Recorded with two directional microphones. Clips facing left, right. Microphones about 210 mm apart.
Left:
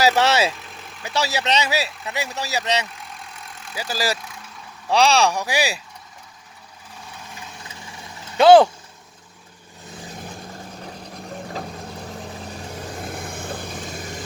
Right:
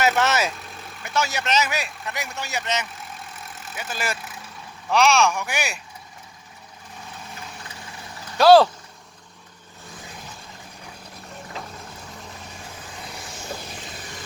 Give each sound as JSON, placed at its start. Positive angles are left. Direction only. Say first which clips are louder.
{"t": 0.0, "sound": "speech", "louder": "left 3 dB", "side_deg": 30}
{"t": 8.4, "sound": "speech", "louder": "left 2 dB", "side_deg": 20}
{"t": 12.0, "sound": "vehicle", "louder": "left 6 dB", "side_deg": 35}
{"t": 12.8, "sound": "vehicle", "louder": "left 9 dB", "side_deg": 45}